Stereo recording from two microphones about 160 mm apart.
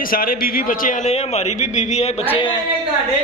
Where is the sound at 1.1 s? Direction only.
45° left (ahead or behind).